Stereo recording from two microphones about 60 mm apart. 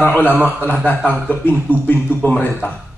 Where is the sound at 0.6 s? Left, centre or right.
Left.